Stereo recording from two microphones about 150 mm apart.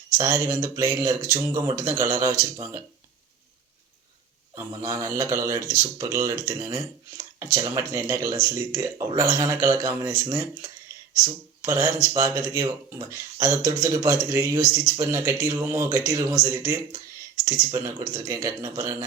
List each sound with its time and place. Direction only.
0.2 s speech: 20° right (ahead or behind)
4.5 s speech: 25° right (ahead or behind)